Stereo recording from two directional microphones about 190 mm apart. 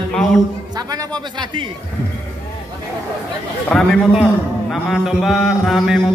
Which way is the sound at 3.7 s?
5° left (ahead or behind).